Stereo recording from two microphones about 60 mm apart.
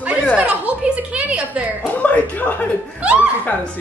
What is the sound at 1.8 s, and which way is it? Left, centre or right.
Speech, left.